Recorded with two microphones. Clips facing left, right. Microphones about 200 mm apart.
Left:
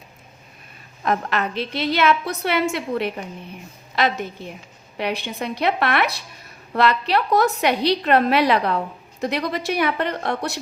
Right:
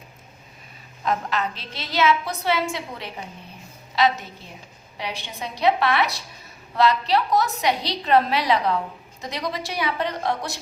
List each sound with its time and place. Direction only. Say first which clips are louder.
1.0 s a woman's voice: left 2 dB; 60° left (ahead or behind)